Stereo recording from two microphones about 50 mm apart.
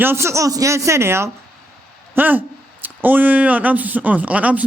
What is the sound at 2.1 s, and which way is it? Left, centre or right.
Speech, right.